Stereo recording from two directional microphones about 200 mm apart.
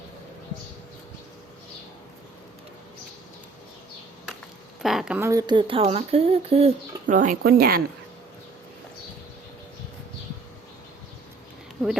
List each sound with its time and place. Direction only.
4.8 s speech: centre (ahead or behind); by 6.7 s 30° right (ahead or behind)
7.1 s speech: 40° right (ahead or behind)